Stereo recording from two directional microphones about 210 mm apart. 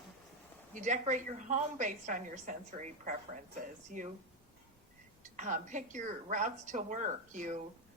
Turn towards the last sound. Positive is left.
turn(degrees=-35)  # may be behind; listen again after turning